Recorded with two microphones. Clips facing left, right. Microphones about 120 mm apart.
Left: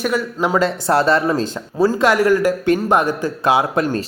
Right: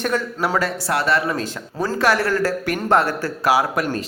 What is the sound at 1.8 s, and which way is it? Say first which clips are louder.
Speech: left 5 dB; 15° left (ahead or behind).